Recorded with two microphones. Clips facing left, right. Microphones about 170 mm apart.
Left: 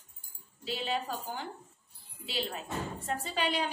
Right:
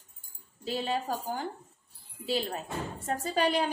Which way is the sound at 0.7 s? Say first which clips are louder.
Right 3 dB; 45° right (ahead or behind).